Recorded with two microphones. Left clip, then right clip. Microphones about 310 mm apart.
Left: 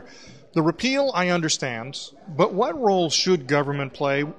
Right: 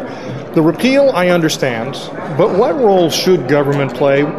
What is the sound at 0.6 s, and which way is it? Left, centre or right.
A man's voice, left.